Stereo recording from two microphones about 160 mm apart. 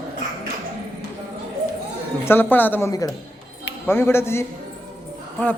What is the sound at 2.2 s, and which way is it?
Speech, 15° left (ahead or behind).